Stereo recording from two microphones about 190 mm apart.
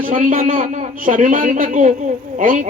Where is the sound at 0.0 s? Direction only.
45° right (ahead or behind).